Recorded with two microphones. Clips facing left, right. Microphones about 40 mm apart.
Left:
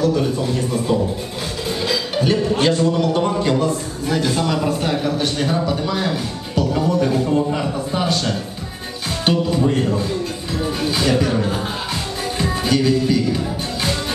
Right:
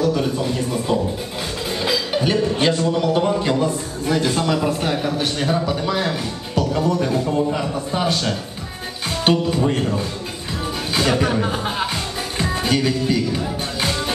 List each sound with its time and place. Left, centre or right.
0.0 s a man's voice: centre
12.4 s music: centre